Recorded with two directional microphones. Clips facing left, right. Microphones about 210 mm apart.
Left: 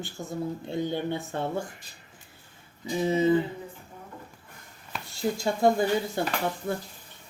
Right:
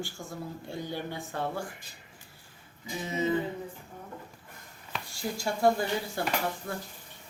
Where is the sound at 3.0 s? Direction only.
30° left (ahead or behind).